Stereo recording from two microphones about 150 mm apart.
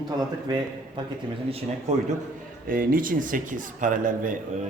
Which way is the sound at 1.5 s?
40° right (ahead or behind).